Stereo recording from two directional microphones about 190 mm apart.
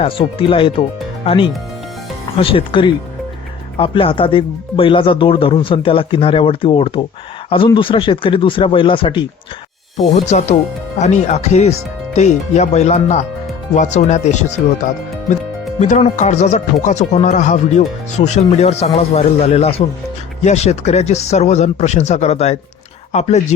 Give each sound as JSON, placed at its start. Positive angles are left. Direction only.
{"t": 0.0, "sound": "speech", "side_deg": 30}
{"t": 10.1, "sound": "speech", "side_deg": 35}
{"t": 15.8, "sound": "speech", "side_deg": 40}